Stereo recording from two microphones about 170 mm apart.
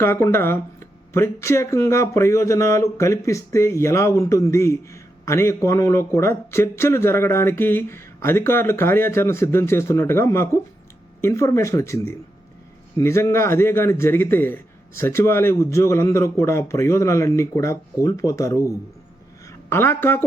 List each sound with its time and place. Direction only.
0.0 s speech: 15° left (ahead or behind)
19.7 s speech: 15° left (ahead or behind)